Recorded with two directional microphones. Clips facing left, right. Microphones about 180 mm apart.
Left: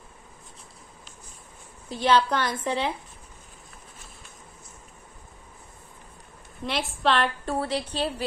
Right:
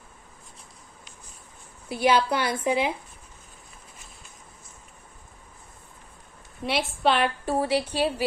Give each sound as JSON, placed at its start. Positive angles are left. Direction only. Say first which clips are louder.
{"t": 1.9, "sound": "a woman's voice", "louder": "even", "side_deg": -10}
{"t": 6.6, "sound": "a woman's voice", "louder": "right 2 dB", "side_deg": 0}